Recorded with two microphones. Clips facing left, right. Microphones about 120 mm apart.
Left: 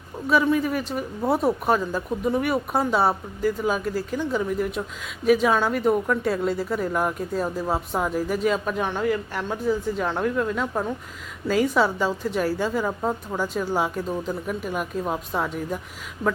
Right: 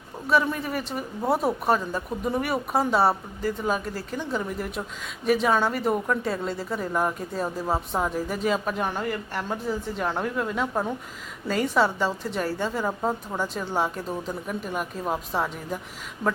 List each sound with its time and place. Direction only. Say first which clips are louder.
0.3 s speech: left 3 dB; centre (ahead or behind)